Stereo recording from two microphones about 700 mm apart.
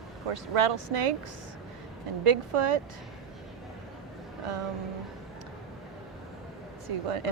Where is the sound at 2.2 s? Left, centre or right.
Right.